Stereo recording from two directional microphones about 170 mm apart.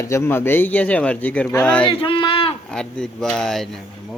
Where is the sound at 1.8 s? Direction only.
30° left (ahead or behind).